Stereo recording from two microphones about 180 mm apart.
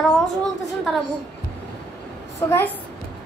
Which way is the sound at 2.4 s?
15° left (ahead or behind).